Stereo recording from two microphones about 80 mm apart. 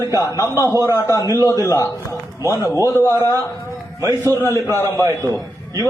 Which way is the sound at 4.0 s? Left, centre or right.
Right.